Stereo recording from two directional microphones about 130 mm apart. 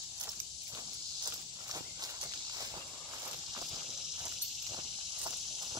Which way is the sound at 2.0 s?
30° right (ahead or behind).